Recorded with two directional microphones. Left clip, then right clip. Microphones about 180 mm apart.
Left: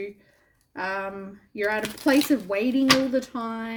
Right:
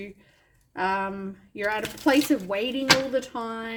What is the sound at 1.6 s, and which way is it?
A woman's voice, 25° left (ahead or behind).